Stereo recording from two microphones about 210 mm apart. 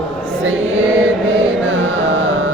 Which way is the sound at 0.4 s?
70° right (ahead or behind).